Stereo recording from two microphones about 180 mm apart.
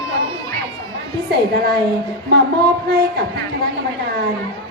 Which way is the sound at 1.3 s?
60° right (ahead or behind).